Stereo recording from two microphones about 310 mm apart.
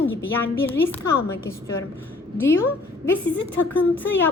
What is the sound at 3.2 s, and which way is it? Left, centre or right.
Speech, left.